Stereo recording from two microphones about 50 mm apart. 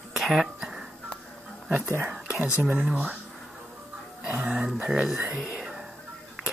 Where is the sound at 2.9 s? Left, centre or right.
Right.